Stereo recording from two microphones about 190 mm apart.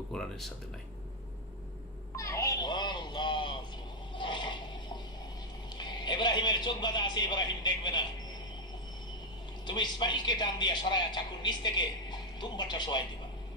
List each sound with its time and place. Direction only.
0.1 s speech: 5° left (ahead or behind)
2.1 s a sound: 15° left (ahead or behind)
5.8 s a man's voice: 25° left (ahead or behind)
9.7 s a man's voice: 25° left (ahead or behind)